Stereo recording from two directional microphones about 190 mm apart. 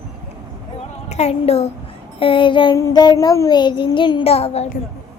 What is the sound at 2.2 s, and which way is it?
Child singing, 25° left (ahead or behind).